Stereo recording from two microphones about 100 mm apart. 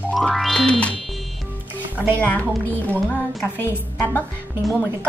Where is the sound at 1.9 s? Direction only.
20° right (ahead or behind).